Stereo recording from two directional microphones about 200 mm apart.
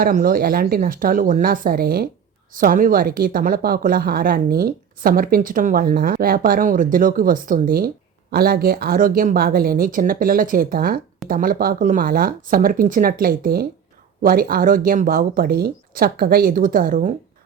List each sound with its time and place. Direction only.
0.0 s speech: 45° right (ahead or behind)